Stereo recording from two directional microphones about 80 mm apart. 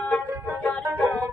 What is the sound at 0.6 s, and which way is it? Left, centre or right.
Music, left.